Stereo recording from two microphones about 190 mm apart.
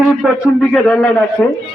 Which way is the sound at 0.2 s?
5° right (ahead or behind).